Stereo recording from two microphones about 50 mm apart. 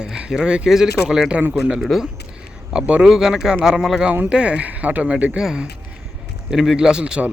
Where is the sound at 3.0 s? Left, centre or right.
Centre.